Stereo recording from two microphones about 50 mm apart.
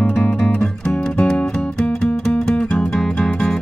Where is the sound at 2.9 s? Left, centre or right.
Centre.